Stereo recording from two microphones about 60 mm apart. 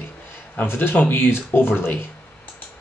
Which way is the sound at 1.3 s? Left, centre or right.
Left.